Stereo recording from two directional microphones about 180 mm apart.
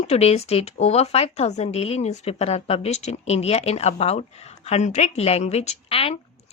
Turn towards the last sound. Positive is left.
turn(degrees=30)  # may be behind; listen again after turning